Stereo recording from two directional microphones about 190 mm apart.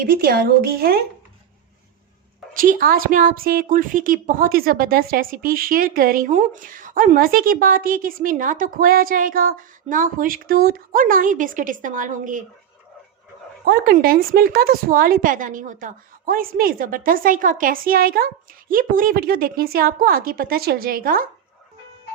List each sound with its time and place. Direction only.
0.0 s a woman's voice: 50° right (ahead or behind)
2.6 s a woman's voice: 45° right (ahead or behind)
13.7 s a woman's voice: 50° right (ahead or behind)